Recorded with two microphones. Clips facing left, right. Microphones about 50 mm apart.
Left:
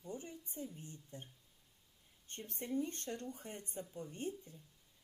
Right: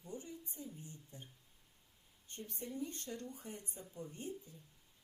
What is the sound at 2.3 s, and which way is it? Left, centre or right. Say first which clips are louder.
Speech: left 4 dB; left.